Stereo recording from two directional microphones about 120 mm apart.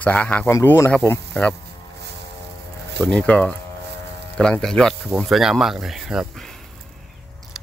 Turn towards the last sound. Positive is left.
turn(degrees=0)  # may be behind; listen again after turning